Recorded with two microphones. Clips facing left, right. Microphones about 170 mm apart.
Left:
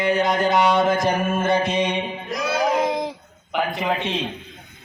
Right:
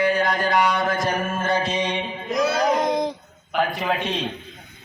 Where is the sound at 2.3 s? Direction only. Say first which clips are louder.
Right 2 dB; centre (ahead or behind).